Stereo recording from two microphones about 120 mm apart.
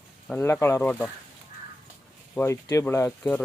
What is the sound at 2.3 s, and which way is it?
Speech, 25° left (ahead or behind).